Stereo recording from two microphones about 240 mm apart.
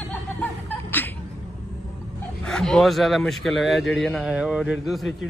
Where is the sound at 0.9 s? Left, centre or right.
Centre.